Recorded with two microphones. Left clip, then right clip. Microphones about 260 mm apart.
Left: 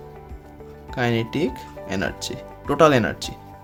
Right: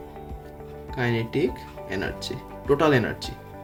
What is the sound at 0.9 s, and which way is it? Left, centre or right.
Speech, left.